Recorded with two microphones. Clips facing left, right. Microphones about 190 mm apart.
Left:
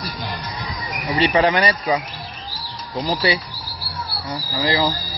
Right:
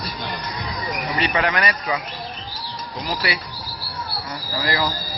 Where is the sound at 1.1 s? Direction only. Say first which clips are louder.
Left 6 dB; 30° left (ahead or behind).